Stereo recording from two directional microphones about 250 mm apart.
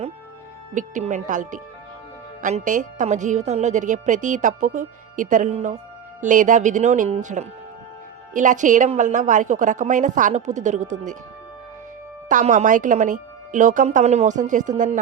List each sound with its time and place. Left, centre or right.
0.7 s a woman's voice: right
12.3 s a woman's voice: right